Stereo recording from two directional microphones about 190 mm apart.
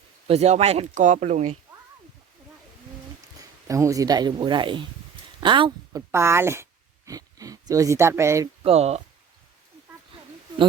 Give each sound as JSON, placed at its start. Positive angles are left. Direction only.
{"t": 0.3, "sound": "speech", "side_deg": -35}
{"t": 3.7, "sound": "speech", "side_deg": -15}
{"t": 6.1, "sound": "speech", "side_deg": -15}
{"t": 8.6, "sound": "speech", "side_deg": -35}